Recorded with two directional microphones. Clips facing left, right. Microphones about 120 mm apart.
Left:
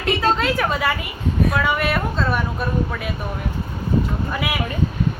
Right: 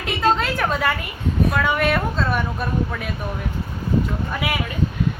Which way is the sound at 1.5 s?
5° left (ahead or behind).